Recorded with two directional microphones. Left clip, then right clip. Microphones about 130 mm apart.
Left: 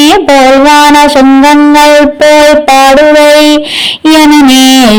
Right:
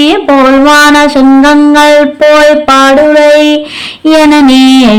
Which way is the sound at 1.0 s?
20° left (ahead or behind).